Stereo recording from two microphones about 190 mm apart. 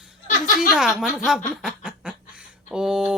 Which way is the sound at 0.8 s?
5° right (ahead or behind).